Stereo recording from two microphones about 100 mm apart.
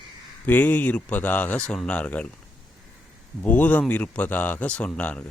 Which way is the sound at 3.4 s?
15° left (ahead or behind).